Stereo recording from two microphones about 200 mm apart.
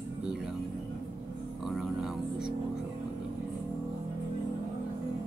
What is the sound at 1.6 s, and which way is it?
Music, centre (ahead or behind).